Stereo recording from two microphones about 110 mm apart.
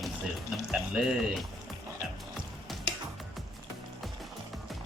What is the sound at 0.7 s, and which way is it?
Speech, 5° right (ahead or behind).